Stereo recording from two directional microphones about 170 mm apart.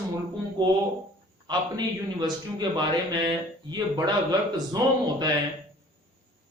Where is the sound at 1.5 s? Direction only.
25° right (ahead or behind).